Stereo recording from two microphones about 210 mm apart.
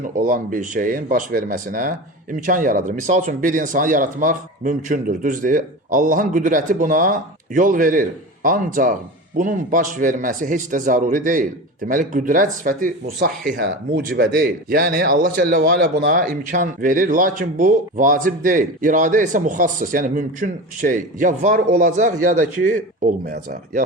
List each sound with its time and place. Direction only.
0.0 s speech: 40° right (ahead or behind)